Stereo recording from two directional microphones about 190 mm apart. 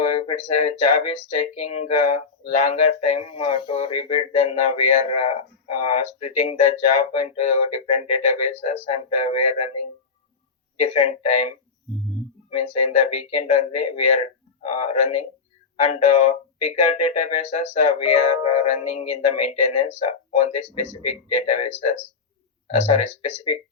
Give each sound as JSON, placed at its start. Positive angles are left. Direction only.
{"t": 0.0, "sound": "speech", "side_deg": 35}
{"t": 10.8, "sound": "speech", "side_deg": 35}